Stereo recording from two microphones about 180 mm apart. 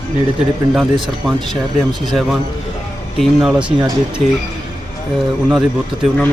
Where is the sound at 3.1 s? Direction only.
5° right (ahead or behind).